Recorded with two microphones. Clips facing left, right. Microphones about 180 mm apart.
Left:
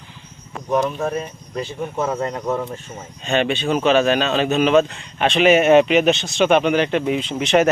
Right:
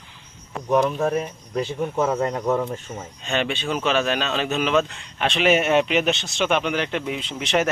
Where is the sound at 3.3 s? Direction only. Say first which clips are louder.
Left 5 dB; 55° left (ahead or behind).